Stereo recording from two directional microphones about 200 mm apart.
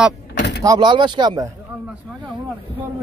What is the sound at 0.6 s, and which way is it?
Speech, 20° right (ahead or behind).